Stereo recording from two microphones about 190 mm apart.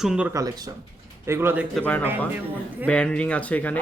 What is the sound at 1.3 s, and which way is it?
Speech, 10° right (ahead or behind).